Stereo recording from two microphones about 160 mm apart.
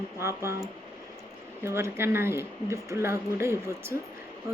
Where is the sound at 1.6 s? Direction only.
15° right (ahead or behind).